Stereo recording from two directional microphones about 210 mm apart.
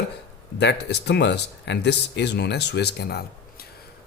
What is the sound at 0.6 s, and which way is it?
A man's voice, 55° left (ahead or behind).